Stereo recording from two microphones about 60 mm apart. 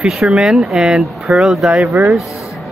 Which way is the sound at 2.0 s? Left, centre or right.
Right.